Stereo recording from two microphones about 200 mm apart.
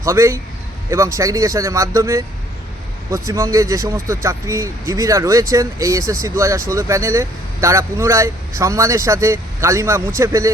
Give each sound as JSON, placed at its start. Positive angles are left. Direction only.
{"t": 0.0, "sound": "speech", "side_deg": -15}